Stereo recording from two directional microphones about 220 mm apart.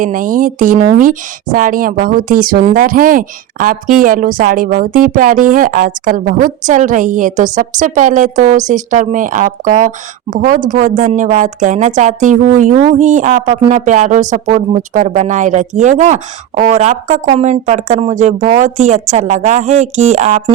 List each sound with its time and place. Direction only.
0.0 s speech: 35° right (ahead or behind)